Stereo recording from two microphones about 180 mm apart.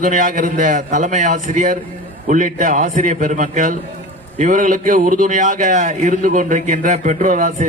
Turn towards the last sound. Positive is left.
turn(degrees=-45)  # may be behind; listen again after turning